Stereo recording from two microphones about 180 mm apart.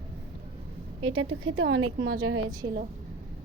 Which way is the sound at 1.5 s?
90° right.